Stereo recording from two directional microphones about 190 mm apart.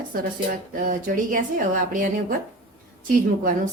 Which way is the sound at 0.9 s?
45° right (ahead or behind).